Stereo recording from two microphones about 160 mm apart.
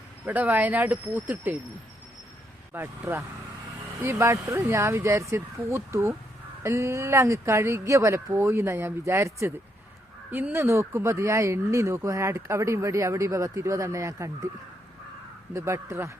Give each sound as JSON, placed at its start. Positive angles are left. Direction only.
{"t": 0.3, "sound": "speech", "side_deg": -10}
{"t": 2.7, "sound": "speech", "side_deg": -15}
{"t": 15.5, "sound": "speech", "side_deg": -15}